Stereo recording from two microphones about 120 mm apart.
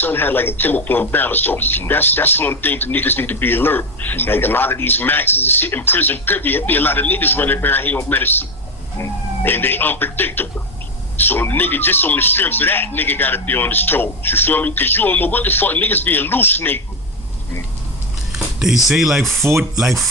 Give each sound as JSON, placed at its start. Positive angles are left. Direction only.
{"t": 0.0, "sound": "speech", "side_deg": 15}
{"t": 18.3, "sound": "speech", "side_deg": -5}
{"t": 19.5, "sound": "speech", "side_deg": -25}